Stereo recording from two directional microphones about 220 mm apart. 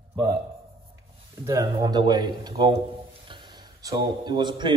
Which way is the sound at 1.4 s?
15° right (ahead or behind).